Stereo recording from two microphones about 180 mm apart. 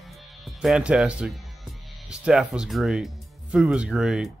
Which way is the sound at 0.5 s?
Centre (ahead or behind).